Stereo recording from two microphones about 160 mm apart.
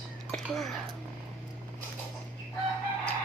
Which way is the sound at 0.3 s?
Centre (ahead or behind).